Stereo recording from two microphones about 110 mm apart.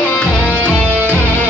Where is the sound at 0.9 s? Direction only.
20° right (ahead or behind).